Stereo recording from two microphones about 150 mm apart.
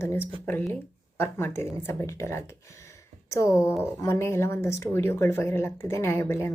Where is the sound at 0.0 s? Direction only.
15° left (ahead or behind).